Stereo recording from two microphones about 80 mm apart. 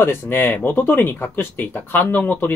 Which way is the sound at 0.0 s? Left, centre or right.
Left.